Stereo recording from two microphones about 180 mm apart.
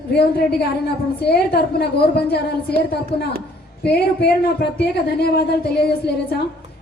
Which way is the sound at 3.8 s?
65° left (ahead or behind).